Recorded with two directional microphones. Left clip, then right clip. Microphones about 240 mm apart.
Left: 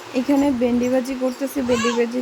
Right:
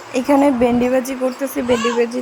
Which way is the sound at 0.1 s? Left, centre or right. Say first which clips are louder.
Right 5 dB; centre.